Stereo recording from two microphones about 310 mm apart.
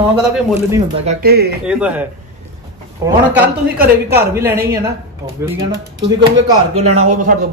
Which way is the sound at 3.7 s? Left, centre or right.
Right.